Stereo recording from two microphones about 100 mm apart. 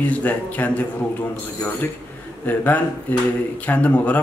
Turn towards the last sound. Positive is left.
turn(degrees=15)  # may be behind; listen again after turning